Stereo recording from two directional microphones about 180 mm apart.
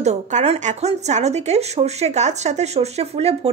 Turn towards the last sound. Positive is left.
turn(degrees=-35)  # may be behind; listen again after turning